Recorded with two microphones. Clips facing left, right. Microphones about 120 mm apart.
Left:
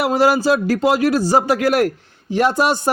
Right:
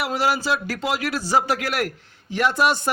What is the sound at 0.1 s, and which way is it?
A man's voice, 45° left (ahead or behind).